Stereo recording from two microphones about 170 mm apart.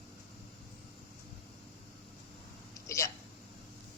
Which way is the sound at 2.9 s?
15° left (ahead or behind).